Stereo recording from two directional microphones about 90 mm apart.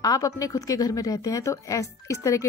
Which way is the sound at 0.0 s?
40° left (ahead or behind).